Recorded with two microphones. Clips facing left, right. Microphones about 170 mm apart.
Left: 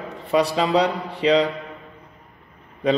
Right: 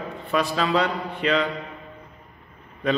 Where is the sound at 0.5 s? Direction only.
20° left (ahead or behind).